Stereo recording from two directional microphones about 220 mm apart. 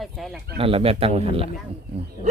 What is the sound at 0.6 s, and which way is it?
Speech, 25° right (ahead or behind).